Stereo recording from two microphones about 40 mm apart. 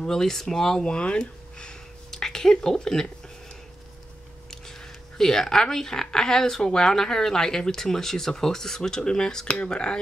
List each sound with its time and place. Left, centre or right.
0.0 s a woman's voice: centre
0.9 s speech: left
2.0 s a woman's voice: centre
4.5 s a woman's voice: centre
9.5 s speech: left